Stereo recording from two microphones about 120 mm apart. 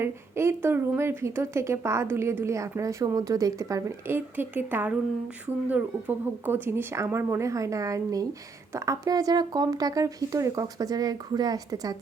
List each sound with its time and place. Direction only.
0.0 s speech: 20° right (ahead or behind)